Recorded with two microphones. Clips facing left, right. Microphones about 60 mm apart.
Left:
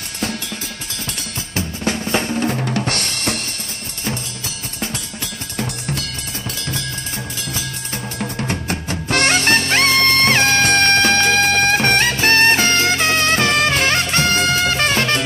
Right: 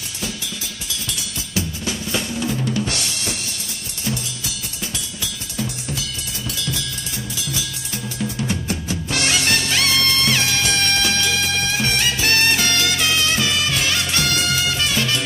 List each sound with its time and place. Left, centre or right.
1.0 s drum: left
4.9 s drum: left
6.6 s music: left